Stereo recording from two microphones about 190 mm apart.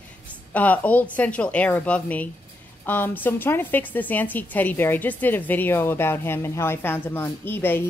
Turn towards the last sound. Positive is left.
turn(degrees=10)  # may be behind; listen again after turning